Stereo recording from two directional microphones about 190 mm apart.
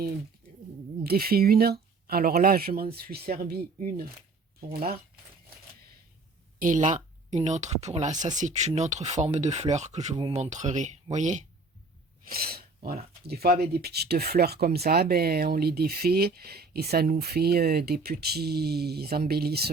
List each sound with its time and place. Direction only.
1.0 s speech: 50° right (ahead or behind)
6.6 s speech: 40° right (ahead or behind)
12.4 s speech: 55° right (ahead or behind)